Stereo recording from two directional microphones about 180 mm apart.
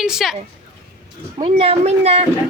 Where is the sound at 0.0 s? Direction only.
5° right (ahead or behind).